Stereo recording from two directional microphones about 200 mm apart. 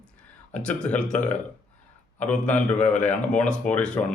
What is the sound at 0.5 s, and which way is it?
Speech, 5° left (ahead or behind).